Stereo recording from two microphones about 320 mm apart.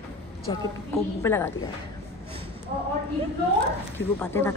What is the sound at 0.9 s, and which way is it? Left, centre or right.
Speech, centre.